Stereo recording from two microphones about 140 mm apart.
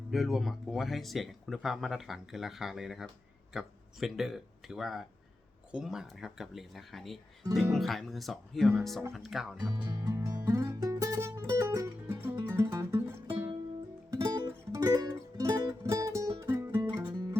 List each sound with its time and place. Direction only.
0.1 s speech: centre (ahead or behind)
9.8 s music: 25° right (ahead or behind)